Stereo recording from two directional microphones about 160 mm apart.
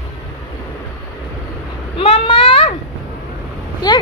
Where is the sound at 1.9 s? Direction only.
35° left (ahead or behind).